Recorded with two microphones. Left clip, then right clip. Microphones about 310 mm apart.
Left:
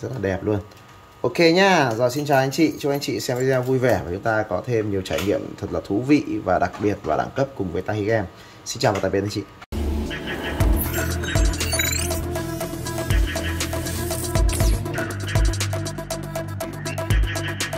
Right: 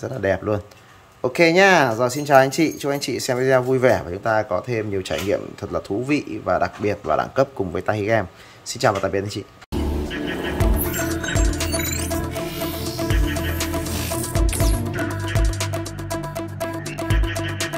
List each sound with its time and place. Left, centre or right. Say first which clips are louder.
0.2 s speech: right 3 dB; centre
10.9 s music: right 2 dB; centre